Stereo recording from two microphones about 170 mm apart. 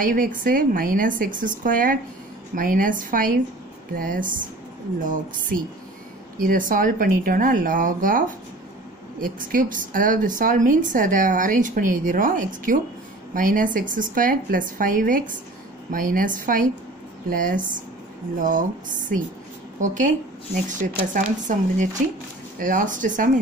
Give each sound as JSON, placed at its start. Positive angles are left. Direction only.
{"t": 0.0, "sound": "a woman's voice", "side_deg": -55}
{"t": 6.3, "sound": "a woman's voice", "side_deg": -55}